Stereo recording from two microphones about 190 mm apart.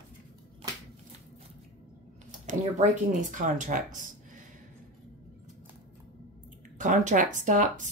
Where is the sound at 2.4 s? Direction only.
40° right (ahead or behind).